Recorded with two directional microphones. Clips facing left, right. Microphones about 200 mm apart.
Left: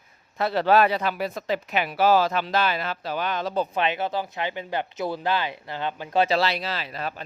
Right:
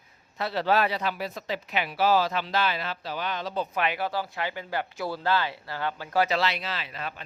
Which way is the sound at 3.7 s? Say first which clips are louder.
Left 3 dB; 25° left (ahead or behind).